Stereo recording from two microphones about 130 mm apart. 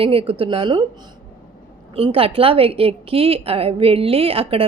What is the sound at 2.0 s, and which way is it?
A woman's voice, 45° right (ahead or behind).